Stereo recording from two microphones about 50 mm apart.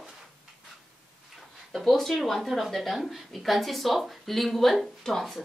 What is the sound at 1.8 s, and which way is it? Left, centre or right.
A woman's voice, centre.